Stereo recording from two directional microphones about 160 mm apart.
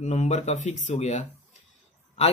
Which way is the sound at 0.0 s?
45° left (ahead or behind).